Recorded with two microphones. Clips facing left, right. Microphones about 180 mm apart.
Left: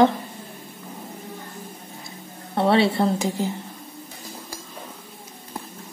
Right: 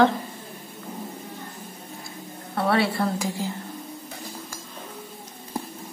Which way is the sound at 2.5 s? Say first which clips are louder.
Left 4 dB; 25° left (ahead or behind).